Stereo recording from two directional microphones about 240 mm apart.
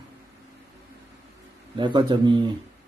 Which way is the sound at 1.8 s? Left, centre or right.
Centre.